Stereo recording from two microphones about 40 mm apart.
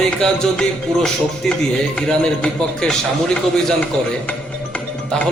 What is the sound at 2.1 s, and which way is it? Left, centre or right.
Speech, left.